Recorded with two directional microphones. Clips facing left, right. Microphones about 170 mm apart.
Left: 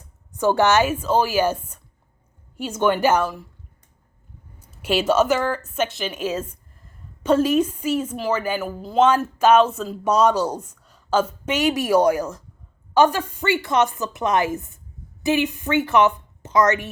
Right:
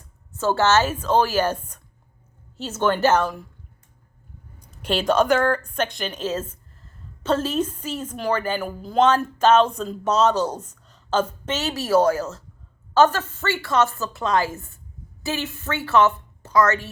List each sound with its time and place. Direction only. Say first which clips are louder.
0.3 s a woman's voice: left 2 dB; 15° left (ahead or behind)
4.6 s a woman's voice: left 2 dB; 5° left (ahead or behind)